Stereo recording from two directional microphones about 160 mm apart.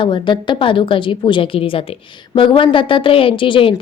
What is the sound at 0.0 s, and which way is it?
A woman's voice, 30° left (ahead or behind).